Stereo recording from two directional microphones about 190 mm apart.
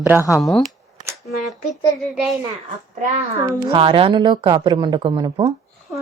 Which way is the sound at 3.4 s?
25° right (ahead or behind).